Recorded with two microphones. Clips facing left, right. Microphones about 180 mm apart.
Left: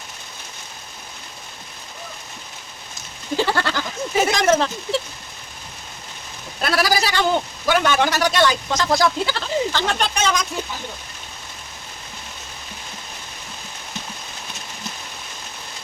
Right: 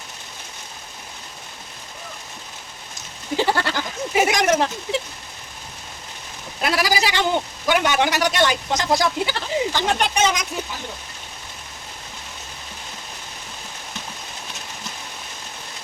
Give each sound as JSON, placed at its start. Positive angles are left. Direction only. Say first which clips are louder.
{"t": 3.3, "sound": "goat", "louder": "even", "side_deg": -15}
{"t": 6.6, "sound": "a man's voice", "louder": "left 1 dB", "side_deg": -15}